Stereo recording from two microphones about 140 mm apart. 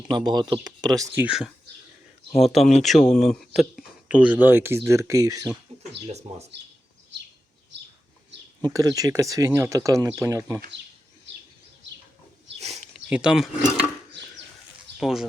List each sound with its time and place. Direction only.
0.3 s speech: 30° right (ahead or behind)
1.2 s speech: 5° right (ahead or behind); by 5.5 s 25° right (ahead or behind)
6.1 s speech: 50° right (ahead or behind)
8.6 s speech: 25° right (ahead or behind)
12.5 s a sound: 50° right (ahead or behind)
13.1 s speech: 5° right (ahead or behind)
14.9 s speech: centre (ahead or behind)